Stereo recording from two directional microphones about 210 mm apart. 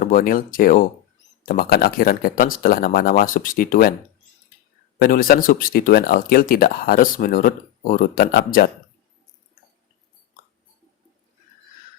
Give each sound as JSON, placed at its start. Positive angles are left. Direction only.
{"t": 0.0, "sound": "speech", "side_deg": 40}
{"t": 4.9, "sound": "speech", "side_deg": 45}